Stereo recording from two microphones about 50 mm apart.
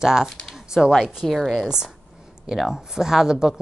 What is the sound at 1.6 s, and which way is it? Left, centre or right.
A woman's voice, centre.